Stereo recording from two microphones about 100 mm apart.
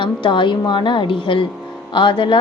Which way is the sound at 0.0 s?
55° left (ahead or behind).